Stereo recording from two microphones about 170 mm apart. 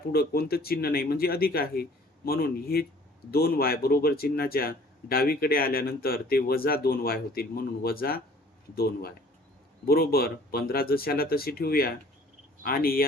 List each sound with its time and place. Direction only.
0.1 s speech: 65° left (ahead or behind)